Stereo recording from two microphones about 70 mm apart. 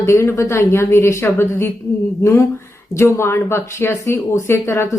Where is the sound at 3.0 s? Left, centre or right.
Left.